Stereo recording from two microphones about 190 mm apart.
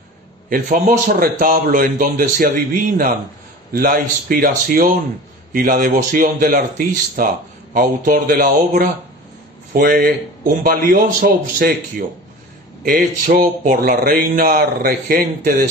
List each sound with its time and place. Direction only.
0.5 s speech: 45° right (ahead or behind)
12.8 s speech: 45° right (ahead or behind)